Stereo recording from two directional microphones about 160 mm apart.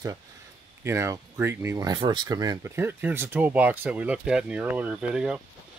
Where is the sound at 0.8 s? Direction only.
20° right (ahead or behind).